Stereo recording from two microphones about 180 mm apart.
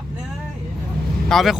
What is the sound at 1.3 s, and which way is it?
Speech, centre (ahead or behind).